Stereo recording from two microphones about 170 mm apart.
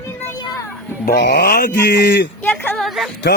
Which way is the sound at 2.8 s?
Centre (ahead or behind).